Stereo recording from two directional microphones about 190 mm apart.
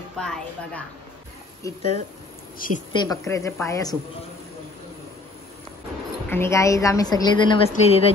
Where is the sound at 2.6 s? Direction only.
45° left (ahead or behind).